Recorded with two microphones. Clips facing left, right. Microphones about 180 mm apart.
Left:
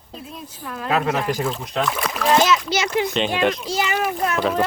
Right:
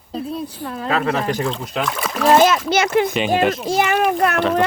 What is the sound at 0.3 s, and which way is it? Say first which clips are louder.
Speech: right 6 dB; 30° right (ahead or behind).